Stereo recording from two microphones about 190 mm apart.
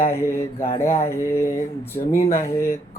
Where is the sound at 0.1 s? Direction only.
15° left (ahead or behind).